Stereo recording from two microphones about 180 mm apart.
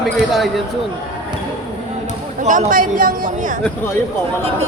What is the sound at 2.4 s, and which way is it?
Speech, 45° right (ahead or behind).